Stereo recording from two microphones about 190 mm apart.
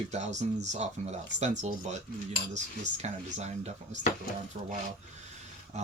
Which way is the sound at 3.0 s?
35° right (ahead or behind).